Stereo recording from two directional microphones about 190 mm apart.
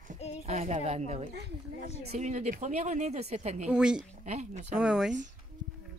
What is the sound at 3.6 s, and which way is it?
Speech, 5° right (ahead or behind).